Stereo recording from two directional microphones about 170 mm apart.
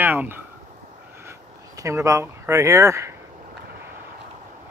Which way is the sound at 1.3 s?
15° right (ahead or behind).